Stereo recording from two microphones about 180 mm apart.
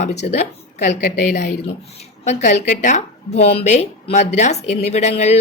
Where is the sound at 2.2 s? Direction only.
40° left (ahead or behind).